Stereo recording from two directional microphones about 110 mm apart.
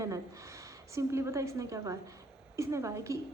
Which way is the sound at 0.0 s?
30° right (ahead or behind).